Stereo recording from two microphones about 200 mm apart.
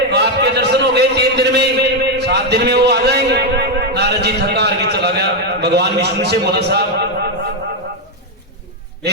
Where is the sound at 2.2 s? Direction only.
55° right (ahead or behind).